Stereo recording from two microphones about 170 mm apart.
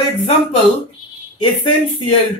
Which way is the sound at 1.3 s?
30° left (ahead or behind).